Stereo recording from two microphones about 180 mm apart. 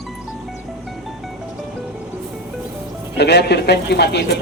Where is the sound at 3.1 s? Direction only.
70° left (ahead or behind).